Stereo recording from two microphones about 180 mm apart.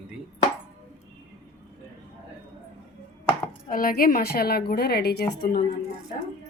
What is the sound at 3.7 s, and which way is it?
A woman's voice, 50° left (ahead or behind).